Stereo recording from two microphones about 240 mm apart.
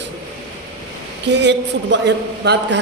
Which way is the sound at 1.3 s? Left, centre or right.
Right.